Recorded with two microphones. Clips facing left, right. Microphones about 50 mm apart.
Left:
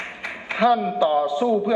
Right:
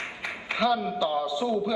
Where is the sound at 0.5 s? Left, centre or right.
Left.